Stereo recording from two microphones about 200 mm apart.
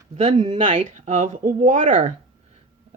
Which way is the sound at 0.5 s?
35° right (ahead or behind).